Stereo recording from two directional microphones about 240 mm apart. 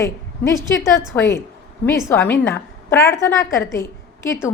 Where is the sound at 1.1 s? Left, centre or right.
Centre.